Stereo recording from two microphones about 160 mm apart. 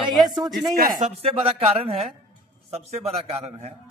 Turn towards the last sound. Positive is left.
turn(degrees=-40)  # may be behind; listen again after turning